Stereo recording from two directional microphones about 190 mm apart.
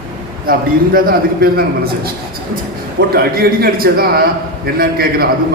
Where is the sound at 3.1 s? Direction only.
55° right (ahead or behind).